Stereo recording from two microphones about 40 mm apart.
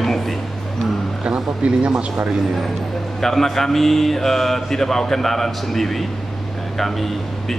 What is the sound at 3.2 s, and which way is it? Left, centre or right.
A man's voice, centre.